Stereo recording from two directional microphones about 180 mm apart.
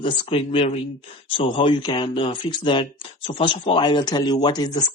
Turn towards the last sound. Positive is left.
turn(degrees=25)  # may be behind; listen again after turning